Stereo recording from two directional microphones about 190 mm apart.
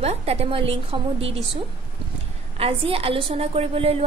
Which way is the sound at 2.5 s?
30° right (ahead or behind).